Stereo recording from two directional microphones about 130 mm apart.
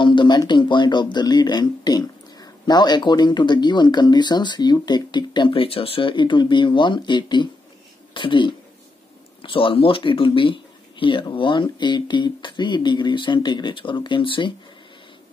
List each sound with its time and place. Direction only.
0.0 s speech: 40° left (ahead or behind)